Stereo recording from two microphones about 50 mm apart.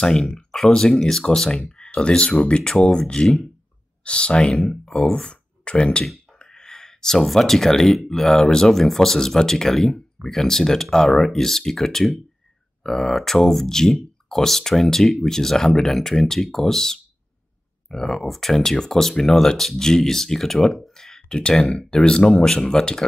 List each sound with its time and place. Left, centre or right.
0.5 s speech: centre
6.4 s a sound: centre
7.2 s speech: centre